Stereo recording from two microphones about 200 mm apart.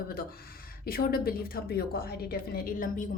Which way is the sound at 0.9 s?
50° left (ahead or behind).